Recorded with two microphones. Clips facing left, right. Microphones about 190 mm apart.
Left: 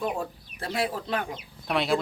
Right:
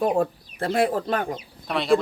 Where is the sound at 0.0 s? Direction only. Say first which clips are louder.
Right 8 dB; 60° right (ahead or behind).